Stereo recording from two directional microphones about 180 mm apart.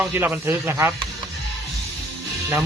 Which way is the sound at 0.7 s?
15° right (ahead or behind).